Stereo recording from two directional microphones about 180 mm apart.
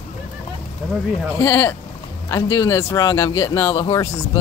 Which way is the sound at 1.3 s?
15° left (ahead or behind).